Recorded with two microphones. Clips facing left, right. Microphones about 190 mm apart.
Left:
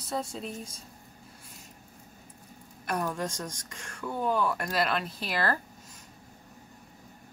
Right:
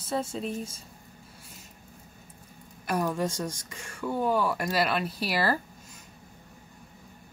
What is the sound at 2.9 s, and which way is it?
Speech, 5° right (ahead or behind).